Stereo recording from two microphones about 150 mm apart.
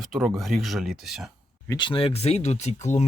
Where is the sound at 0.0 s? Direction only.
Centre (ahead or behind).